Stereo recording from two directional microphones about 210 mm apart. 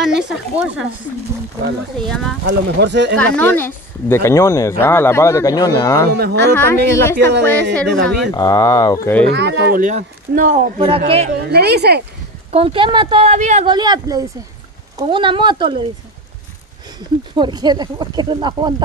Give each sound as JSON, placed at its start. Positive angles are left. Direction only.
{"t": 0.0, "sound": "speech", "side_deg": -5}
{"t": 2.0, "sound": "speech", "side_deg": 0}
{"t": 2.4, "sound": "speech", "side_deg": -55}
{"t": 3.2, "sound": "speech", "side_deg": 10}
{"t": 6.1, "sound": "a woman's voice", "side_deg": -50}
{"t": 6.5, "sound": "speech", "side_deg": 10}
{"t": 7.2, "sound": "speech", "side_deg": -55}
{"t": 7.7, "sound": "speech", "side_deg": 0}
{"t": 8.3, "sound": "speech", "side_deg": 15}
{"t": 9.3, "sound": "speech", "side_deg": -55}
{"t": 11.4, "sound": "a woman's voice", "side_deg": -50}
{"t": 12.4, "sound": "speech", "side_deg": -25}
{"t": 13.7, "sound": "speech", "side_deg": -20}
{"t": 17.4, "sound": "speech", "side_deg": -20}